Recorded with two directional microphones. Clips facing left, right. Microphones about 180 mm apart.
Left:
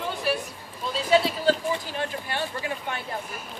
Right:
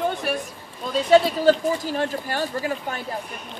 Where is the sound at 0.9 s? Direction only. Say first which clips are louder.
Right 6 dB; 45° right (ahead or behind).